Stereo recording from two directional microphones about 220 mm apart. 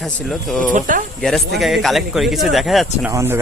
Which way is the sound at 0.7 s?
35° right (ahead or behind).